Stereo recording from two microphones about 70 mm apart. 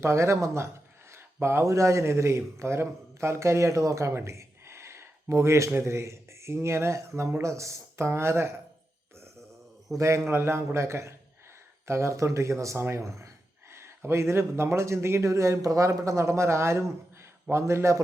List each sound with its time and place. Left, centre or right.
0.0 s speech: right
10.0 s speech: right